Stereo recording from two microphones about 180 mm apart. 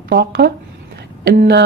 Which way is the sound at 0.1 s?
65° right (ahead or behind).